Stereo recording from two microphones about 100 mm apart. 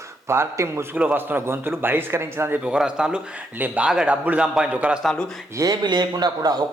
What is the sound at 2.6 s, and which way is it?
A man's voice, 10° right (ahead or behind).